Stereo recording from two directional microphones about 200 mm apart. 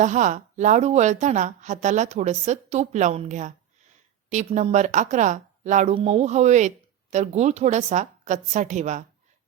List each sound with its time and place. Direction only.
0.0 s speech: 35° right (ahead or behind)